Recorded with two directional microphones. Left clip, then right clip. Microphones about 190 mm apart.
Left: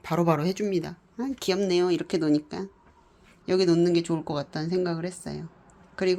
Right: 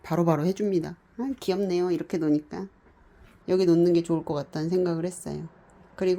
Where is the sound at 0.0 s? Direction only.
25° right (ahead or behind).